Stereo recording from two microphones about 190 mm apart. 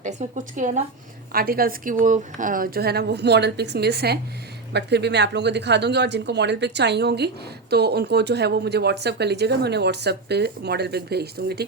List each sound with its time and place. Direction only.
0.0 s a woman's voice: 40° right (ahead or behind); by 11.6 s 60° right (ahead or behind)